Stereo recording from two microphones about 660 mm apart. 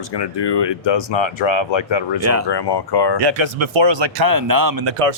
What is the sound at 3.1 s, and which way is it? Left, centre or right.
Speech, right.